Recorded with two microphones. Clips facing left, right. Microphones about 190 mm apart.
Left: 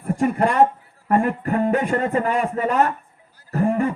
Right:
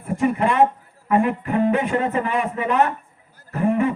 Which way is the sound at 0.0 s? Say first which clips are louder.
Left 1 dB; 45° left (ahead or behind).